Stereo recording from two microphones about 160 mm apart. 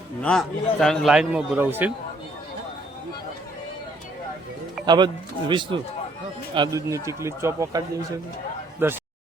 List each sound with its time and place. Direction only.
0.2 s a man's voice: 5° left (ahead or behind)
4.9 s a man's voice: 30° right (ahead or behind); by 9.0 s 10° right (ahead or behind)